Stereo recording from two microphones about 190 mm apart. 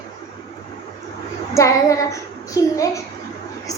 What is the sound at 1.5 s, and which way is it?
Child singing, 15° left (ahead or behind).